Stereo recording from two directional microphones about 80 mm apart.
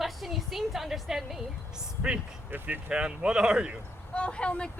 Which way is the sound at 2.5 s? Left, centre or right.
Centre.